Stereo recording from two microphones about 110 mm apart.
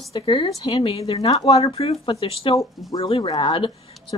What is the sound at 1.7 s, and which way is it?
Speech, 60° left (ahead or behind).